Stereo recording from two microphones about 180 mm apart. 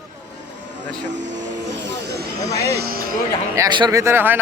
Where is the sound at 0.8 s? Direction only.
80° right.